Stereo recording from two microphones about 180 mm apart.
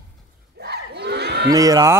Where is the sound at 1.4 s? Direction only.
20° right (ahead or behind).